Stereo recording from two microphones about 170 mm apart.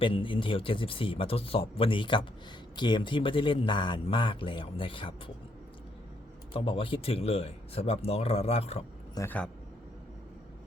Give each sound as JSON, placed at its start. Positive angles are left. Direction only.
{"t": 0.0, "sound": "a man's voice", "side_deg": 30}
{"t": 6.5, "sound": "speech", "side_deg": 30}
{"t": 9.1, "sound": "a man's voice", "side_deg": 10}